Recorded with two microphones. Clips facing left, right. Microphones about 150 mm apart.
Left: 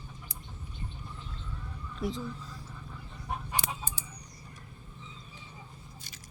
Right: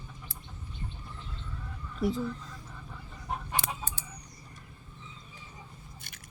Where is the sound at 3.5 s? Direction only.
15° left (ahead or behind).